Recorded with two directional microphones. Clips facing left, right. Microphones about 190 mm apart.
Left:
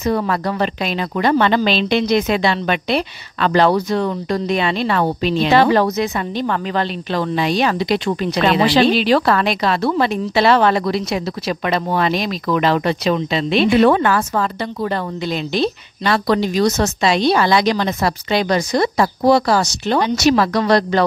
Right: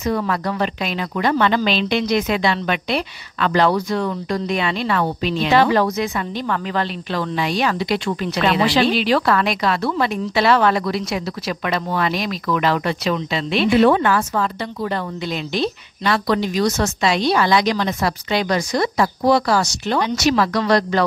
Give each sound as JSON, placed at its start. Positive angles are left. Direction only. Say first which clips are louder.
{"t": 0.0, "sound": "speech", "louder": "left 2 dB", "side_deg": 30}
{"t": 13.8, "sound": "a woman's voice", "louder": "left 1 dB", "side_deg": 45}
{"t": 16.8, "sound": "a woman's voice", "louder": "left 3 dB", "side_deg": 25}